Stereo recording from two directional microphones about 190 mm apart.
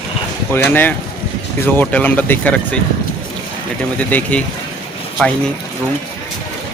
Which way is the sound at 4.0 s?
10° left (ahead or behind).